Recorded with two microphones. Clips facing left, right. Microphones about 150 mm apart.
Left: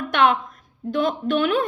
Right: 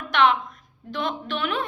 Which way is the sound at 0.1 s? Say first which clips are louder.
Left 1 dB; 45° left (ahead or behind).